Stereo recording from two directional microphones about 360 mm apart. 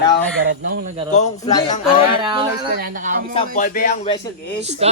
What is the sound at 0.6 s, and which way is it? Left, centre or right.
Speech, right.